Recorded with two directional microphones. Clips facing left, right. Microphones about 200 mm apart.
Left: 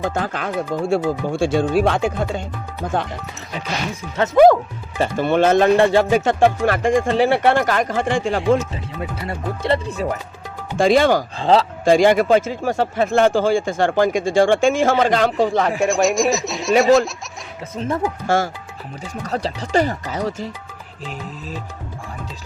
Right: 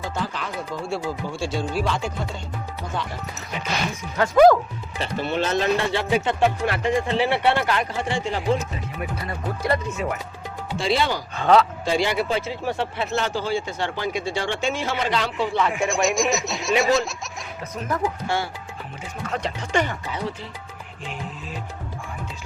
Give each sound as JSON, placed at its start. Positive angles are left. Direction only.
{"t": 0.0, "sound": "speech", "side_deg": 55}
{"t": 4.2, "sound": "speech", "side_deg": 25}
{"t": 4.9, "sound": "speech", "side_deg": 50}
{"t": 8.7, "sound": "speech", "side_deg": 25}
{"t": 10.8, "sound": "speech", "side_deg": 50}
{"t": 11.3, "sound": "speech", "side_deg": 30}
{"t": 11.9, "sound": "speech", "side_deg": 50}
{"t": 15.8, "sound": "speech", "side_deg": 0}
{"t": 17.7, "sound": "speech", "side_deg": 25}
{"t": 18.3, "sound": "speech", "side_deg": 45}